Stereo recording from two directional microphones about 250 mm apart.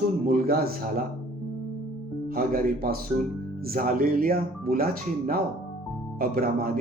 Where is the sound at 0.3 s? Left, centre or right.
Right.